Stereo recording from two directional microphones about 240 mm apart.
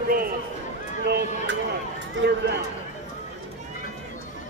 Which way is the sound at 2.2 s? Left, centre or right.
Right.